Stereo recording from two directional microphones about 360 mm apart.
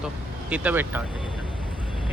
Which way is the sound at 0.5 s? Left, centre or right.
Centre.